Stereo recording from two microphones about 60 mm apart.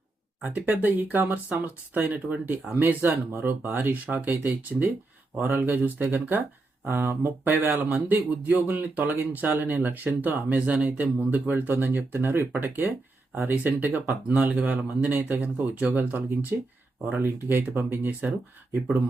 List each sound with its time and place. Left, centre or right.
0.4 s speech: right